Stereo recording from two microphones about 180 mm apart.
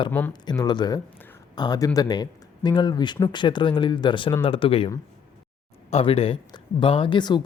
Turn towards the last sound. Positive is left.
turn(degrees=25)  # may be behind; listen again after turning